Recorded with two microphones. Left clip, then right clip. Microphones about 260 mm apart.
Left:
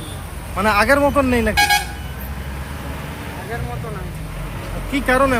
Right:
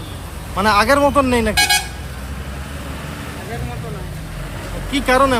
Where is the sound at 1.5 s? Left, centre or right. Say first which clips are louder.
Left 1 dB; right.